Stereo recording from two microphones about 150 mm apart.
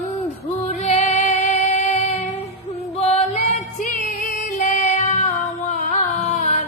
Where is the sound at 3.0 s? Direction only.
45° left (ahead or behind).